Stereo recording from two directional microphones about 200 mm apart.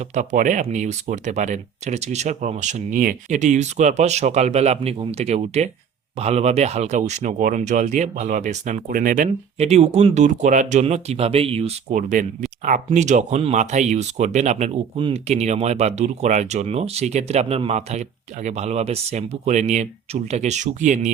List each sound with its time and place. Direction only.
0.1 s speech: 35° right (ahead or behind)